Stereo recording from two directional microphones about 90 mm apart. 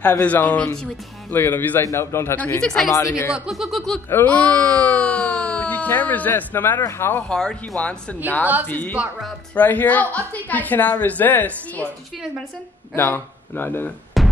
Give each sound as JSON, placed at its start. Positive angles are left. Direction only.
{"t": 0.0, "sound": "speech", "side_deg": 15}
{"t": 2.6, "sound": "speech", "side_deg": 10}
{"t": 2.9, "sound": "speech", "side_deg": 35}
{"t": 3.3, "sound": "speech", "side_deg": -5}
{"t": 4.1, "sound": "speech", "side_deg": 15}
{"t": 7.2, "sound": "speech", "side_deg": 10}
{"t": 12.9, "sound": "speech", "side_deg": 25}
{"t": 14.2, "sound": "music", "side_deg": 0}